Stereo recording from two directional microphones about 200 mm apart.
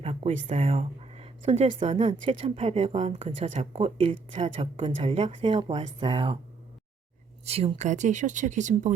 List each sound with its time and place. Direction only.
0.0 s speech: 30° right (ahead or behind)
7.4 s speech: 30° right (ahead or behind)